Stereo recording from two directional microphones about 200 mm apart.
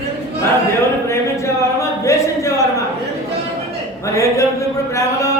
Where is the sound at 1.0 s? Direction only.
15° left (ahead or behind).